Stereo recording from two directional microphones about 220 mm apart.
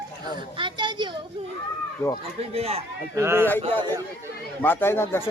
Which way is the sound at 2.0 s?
15° left (ahead or behind).